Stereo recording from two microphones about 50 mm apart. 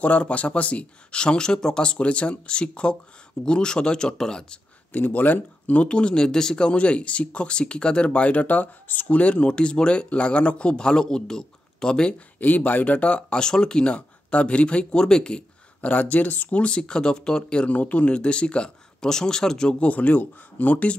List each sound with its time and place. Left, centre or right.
0.0 s speech: left
4.9 s speech: left; by 12.2 s centre
12.4 s speech: left; by 15.4 s centre
15.8 s speech: left
17.7 s speech: left; by 19.7 s centre
19.7 s speech: left